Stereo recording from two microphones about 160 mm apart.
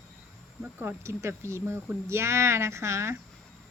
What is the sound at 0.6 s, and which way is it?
Speech, 15° right (ahead or behind).